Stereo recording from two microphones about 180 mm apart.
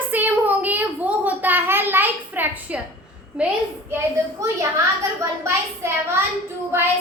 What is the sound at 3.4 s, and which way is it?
Speech, 5° right (ahead or behind).